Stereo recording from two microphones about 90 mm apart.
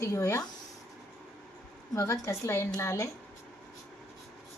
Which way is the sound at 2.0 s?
35° left (ahead or behind).